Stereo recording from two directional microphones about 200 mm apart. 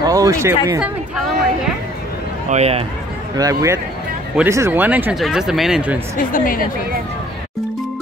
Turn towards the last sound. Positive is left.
turn(degrees=45)  # may be behind; listen again after turning